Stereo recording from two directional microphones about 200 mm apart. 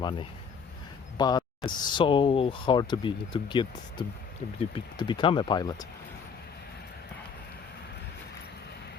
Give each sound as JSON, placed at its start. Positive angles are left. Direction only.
{"t": 0.0, "sound": "speech", "side_deg": 20}